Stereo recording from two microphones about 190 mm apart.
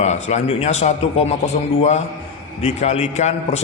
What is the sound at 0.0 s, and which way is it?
A man's voice, 35° left (ahead or behind).